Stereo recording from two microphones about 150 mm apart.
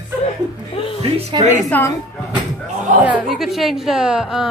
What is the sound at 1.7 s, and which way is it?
Speech, 10° left (ahead or behind).